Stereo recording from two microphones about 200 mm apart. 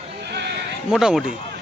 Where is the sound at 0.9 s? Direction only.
Centre (ahead or behind).